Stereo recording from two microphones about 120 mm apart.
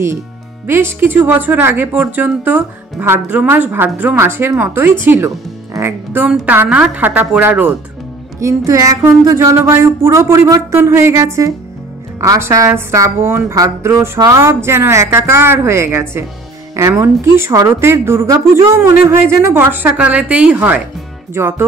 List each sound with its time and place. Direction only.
0.7 s speech: 20° right (ahead or behind)